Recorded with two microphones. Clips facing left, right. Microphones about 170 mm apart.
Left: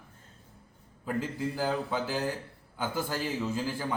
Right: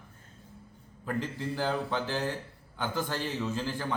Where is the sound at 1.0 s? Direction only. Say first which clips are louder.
Left 2 dB; 5° left (ahead or behind).